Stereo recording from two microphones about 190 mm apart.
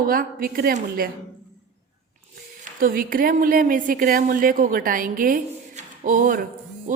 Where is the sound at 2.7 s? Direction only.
45° right (ahead or behind).